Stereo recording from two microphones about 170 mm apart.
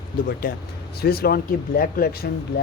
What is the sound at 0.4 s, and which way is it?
Speech, 55° left (ahead or behind).